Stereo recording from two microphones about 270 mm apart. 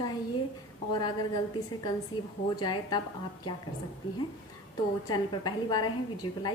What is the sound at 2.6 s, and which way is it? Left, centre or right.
Speech, centre.